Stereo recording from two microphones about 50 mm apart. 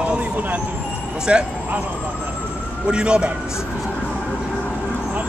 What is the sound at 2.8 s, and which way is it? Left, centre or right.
Speech, centre.